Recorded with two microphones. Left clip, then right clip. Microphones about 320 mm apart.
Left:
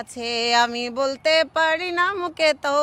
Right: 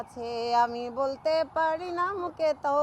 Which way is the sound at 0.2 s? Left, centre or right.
Left.